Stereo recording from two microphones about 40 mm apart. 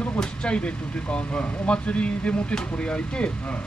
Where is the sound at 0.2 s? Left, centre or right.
Left.